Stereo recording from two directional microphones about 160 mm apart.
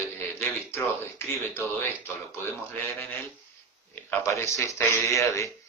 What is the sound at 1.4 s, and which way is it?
Speech, 15° left (ahead or behind).